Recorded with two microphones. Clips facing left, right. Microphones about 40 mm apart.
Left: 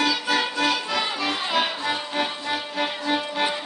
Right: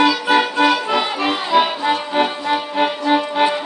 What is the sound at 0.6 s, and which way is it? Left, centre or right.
Accordion, right.